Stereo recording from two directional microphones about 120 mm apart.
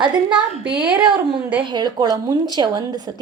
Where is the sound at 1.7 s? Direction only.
35° right (ahead or behind).